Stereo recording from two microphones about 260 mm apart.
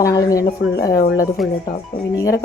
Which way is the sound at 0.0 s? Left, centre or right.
Centre.